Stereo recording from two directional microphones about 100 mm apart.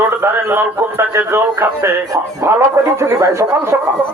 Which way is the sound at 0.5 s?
25° right (ahead or behind).